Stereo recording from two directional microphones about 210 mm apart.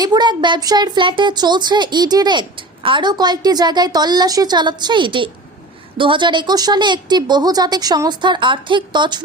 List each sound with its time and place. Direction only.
0.0 s speech: 20° right (ahead or behind)